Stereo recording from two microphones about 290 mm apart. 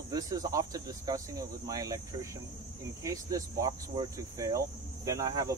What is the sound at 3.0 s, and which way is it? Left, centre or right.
Speech, centre.